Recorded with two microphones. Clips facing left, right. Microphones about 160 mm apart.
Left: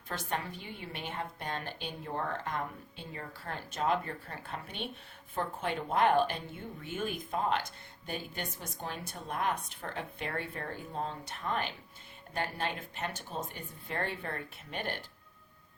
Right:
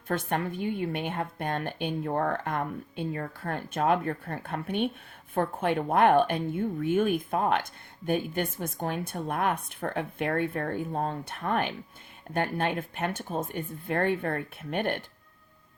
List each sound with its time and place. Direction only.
0.1 s speech: 55° right (ahead or behind)